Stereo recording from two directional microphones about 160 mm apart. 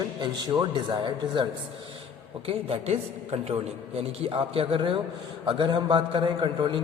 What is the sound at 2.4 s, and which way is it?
A man's voice, 35° right (ahead or behind).